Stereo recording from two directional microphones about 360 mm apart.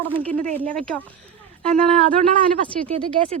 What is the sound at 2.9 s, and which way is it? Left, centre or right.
Speech, centre.